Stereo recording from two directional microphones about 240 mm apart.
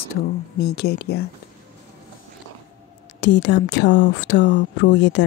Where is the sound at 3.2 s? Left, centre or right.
Left.